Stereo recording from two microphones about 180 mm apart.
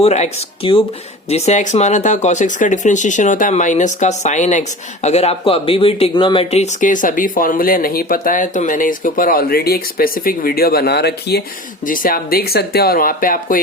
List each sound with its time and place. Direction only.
0.0 s speech: 35° left (ahead or behind); by 11.4 s 65° left (ahead or behind)
11.9 s speech: 50° left (ahead or behind)